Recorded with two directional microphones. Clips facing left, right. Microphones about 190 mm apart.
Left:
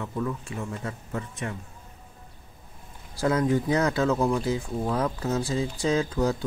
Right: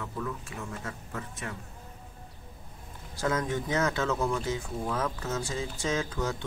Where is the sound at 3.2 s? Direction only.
35° left (ahead or behind).